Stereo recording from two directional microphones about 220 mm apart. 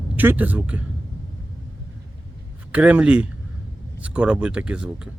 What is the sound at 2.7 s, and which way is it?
Speech, 5° right (ahead or behind).